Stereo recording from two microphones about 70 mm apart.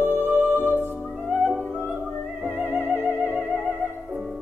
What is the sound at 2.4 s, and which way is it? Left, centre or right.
Music, centre.